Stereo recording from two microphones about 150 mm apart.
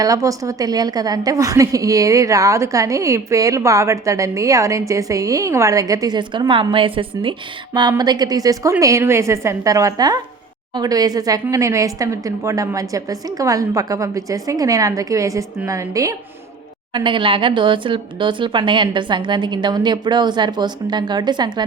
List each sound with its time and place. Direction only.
0.0 s a woman's voice: 20° right (ahead or behind)
16.9 s speech: 35° right (ahead or behind)